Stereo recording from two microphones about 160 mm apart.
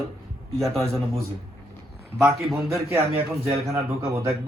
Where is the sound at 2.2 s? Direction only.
5° right (ahead or behind).